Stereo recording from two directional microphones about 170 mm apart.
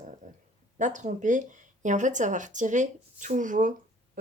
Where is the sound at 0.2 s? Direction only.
45° right (ahead or behind).